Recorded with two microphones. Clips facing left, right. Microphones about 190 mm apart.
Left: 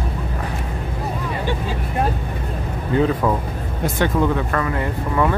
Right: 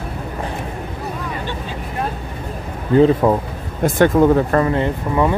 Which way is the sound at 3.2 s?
25° right (ahead or behind).